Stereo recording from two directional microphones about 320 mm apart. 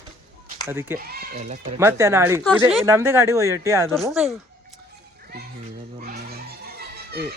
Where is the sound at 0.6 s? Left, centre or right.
Centre.